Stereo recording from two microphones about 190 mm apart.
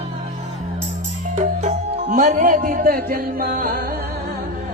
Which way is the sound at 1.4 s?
40° right (ahead or behind).